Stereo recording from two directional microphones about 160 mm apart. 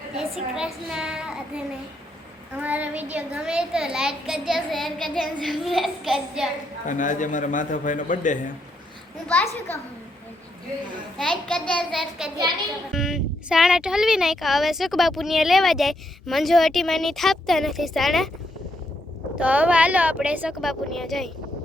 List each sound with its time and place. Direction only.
0.2 s speech: centre (ahead or behind)
6.8 s a man's voice: 50° left (ahead or behind)
9.2 s a child's voice: 10° left (ahead or behind)
11.2 s speech: 5° left (ahead or behind)
19.4 s speech: 10° right (ahead or behind)